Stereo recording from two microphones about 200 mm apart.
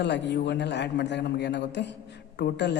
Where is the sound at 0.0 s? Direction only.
60° left (ahead or behind).